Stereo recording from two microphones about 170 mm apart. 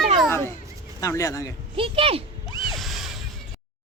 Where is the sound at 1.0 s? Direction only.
20° left (ahead or behind).